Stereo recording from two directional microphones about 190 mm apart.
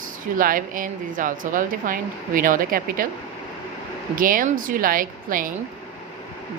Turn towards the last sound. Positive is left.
turn(degrees=-45)  # may be behind; listen again after turning